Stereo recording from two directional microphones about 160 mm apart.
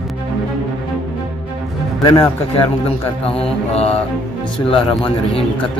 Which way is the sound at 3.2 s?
40° left (ahead or behind).